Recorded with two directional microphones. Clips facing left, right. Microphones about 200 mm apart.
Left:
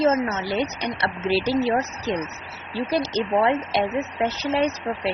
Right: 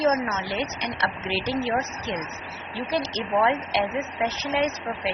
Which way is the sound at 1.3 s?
35° left (ahead or behind).